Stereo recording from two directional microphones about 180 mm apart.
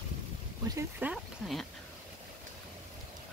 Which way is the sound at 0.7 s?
10° right (ahead or behind).